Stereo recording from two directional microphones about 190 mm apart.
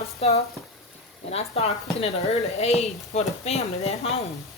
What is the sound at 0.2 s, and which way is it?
Speech, 35° left (ahead or behind).